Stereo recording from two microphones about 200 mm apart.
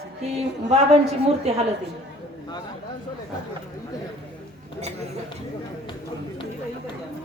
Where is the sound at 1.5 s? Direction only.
30° right (ahead or behind).